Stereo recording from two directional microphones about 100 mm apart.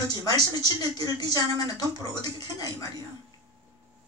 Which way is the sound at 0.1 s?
40° left (ahead or behind).